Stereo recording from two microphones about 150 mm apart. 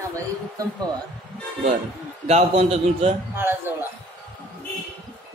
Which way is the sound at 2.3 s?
45° right (ahead or behind).